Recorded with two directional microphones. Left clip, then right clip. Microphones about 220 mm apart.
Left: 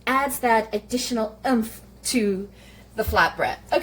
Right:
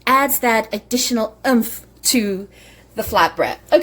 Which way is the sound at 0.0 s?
45° right (ahead or behind).